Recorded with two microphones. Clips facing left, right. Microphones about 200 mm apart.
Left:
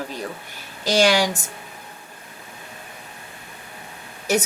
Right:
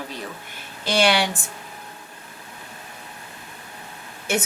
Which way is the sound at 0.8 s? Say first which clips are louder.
Left 2 dB; 40° left (ahead or behind).